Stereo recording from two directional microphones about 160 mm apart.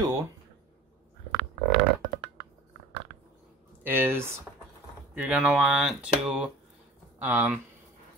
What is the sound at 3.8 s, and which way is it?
Speech, 15° right (ahead or behind).